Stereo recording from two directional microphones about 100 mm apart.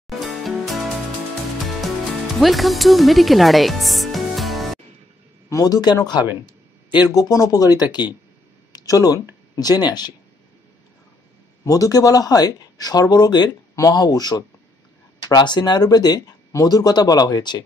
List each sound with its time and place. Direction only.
0.2 s music: centre (ahead or behind)
2.4 s speech: centre (ahead or behind)
5.5 s speech: 40° left (ahead or behind)
11.6 s speech: 35° left (ahead or behind)